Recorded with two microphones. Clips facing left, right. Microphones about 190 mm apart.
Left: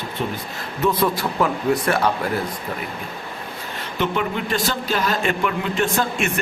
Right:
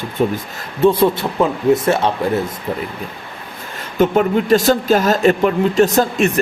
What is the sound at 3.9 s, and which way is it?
Speech, 45° right (ahead or behind).